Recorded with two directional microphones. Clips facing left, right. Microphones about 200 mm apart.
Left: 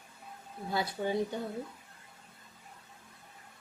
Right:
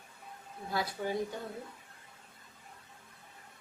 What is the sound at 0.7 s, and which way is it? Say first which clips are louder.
Speech: left 2 dB; 25° left (ahead or behind).